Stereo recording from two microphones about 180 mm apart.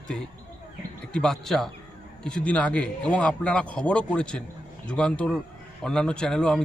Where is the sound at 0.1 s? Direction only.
Centre (ahead or behind).